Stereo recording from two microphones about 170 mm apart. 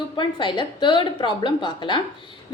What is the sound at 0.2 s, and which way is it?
A woman's voice, 30° left (ahead or behind).